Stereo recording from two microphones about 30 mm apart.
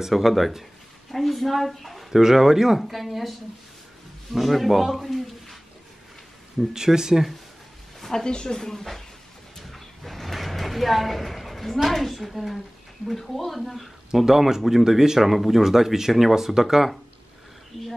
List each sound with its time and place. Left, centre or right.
0.1 s a man's voice: centre
2.0 s speech: centre
2.8 s a man's voice: centre
6.7 s speech: centre
8.0 s a sound: centre
8.3 s speech: left
8.5 s speech: centre
9.6 s mechanisms: centre
11.9 s a man's voice: centre
14.2 s speech: centre